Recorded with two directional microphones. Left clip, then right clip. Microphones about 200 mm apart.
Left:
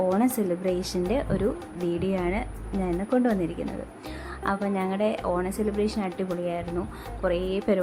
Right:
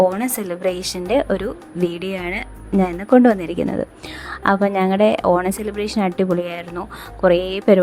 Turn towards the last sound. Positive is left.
turn(degrees=-40)  # may be behind; listen again after turning